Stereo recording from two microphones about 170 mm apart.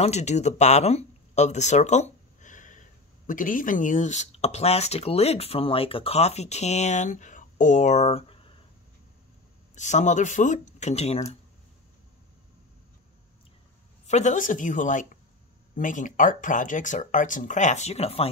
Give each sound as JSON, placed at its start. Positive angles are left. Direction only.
{"t": 0.0, "sound": "speech", "side_deg": 40}
{"t": 9.8, "sound": "speech", "side_deg": 45}
{"t": 14.0, "sound": "speech", "side_deg": 45}